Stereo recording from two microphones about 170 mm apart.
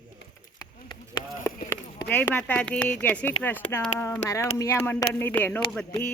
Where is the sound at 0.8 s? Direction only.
25° left (ahead or behind).